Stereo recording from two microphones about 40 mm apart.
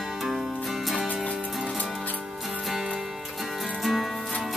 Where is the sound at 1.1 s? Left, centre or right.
Left.